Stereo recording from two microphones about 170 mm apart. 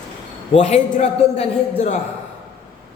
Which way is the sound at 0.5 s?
45° left (ahead or behind).